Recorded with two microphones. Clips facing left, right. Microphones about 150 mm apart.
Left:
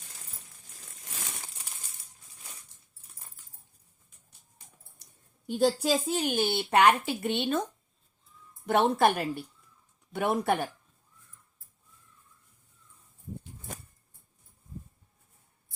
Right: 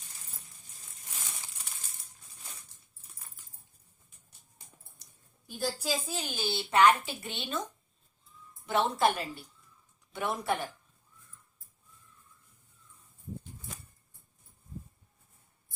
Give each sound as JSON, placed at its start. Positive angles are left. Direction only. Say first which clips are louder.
{"t": 5.5, "sound": "a woman's voice", "louder": "left 8 dB", "side_deg": 70}
{"t": 8.6, "sound": "a woman's voice", "louder": "left 4 dB", "side_deg": 55}